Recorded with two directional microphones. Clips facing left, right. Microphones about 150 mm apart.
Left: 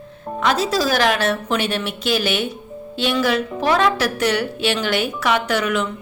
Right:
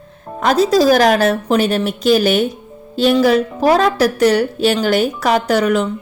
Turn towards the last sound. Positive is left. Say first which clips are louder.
# right 6 dB
turn(degrees=-40)  # may be behind; listen again after turning